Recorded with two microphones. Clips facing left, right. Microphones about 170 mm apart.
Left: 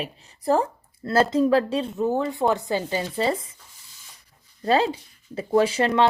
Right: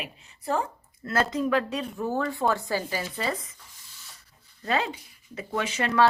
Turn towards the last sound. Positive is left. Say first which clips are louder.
# left 3 dB
turn(degrees=25)  # may be behind; listen again after turning